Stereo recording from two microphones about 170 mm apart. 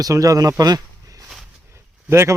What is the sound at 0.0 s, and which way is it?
Speech, 20° right (ahead or behind).